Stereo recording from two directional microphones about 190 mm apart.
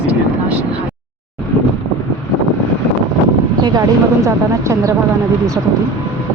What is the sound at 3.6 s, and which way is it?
Speech, 20° right (ahead or behind).